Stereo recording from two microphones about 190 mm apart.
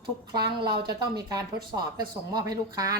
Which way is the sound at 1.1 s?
20° right (ahead or behind).